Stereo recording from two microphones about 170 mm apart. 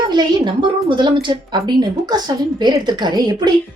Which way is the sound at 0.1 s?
25° right (ahead or behind).